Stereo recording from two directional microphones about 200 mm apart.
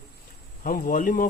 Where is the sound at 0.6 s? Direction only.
45° left (ahead or behind).